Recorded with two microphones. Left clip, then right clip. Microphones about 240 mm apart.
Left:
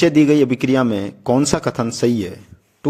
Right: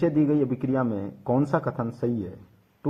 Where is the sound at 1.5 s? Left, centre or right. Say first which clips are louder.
Left 7 dB; left.